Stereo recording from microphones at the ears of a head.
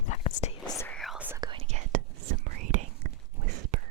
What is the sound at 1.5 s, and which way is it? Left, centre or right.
Whispering, right.